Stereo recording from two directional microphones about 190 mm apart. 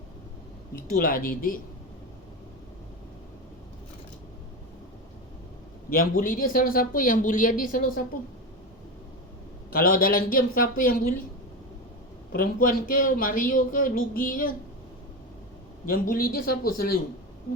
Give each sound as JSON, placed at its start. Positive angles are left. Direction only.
{"t": 0.9, "sound": "speech", "side_deg": 50}
{"t": 5.9, "sound": "speech", "side_deg": 50}
{"t": 9.7, "sound": "speech", "side_deg": 50}
{"t": 12.3, "sound": "speech", "side_deg": 50}
{"t": 15.9, "sound": "speech", "side_deg": 50}